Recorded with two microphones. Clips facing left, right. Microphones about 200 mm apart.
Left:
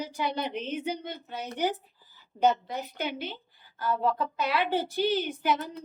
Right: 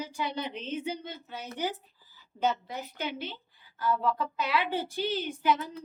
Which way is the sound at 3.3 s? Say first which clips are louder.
Left 3 dB; 50° left (ahead or behind).